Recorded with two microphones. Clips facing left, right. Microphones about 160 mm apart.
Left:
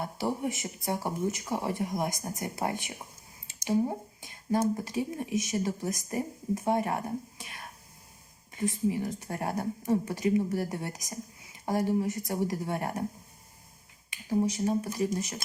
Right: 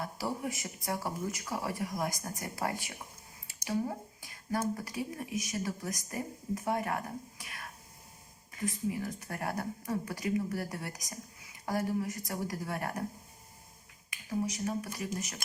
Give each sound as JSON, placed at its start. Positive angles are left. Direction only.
{"t": 0.0, "sound": "speech", "side_deg": 25}
{"t": 14.1, "sound": "speech", "side_deg": 30}